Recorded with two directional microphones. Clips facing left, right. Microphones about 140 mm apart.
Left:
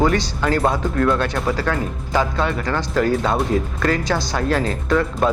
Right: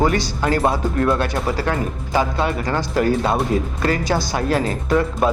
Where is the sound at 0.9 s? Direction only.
25° right (ahead or behind).